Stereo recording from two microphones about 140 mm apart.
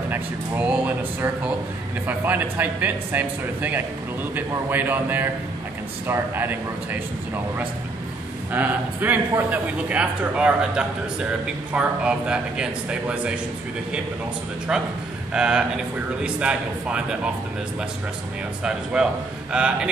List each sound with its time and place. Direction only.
0.1 s speech: 10° right (ahead or behind)
8.5 s speech: 15° right (ahead or behind)
14.7 s a man's voice: 5° right (ahead or behind)
18.6 s speech: 5° right (ahead or behind)